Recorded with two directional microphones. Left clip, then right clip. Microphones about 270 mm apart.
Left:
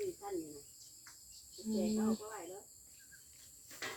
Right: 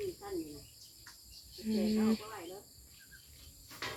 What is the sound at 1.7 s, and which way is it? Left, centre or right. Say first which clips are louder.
Speech: right 3 dB; centre.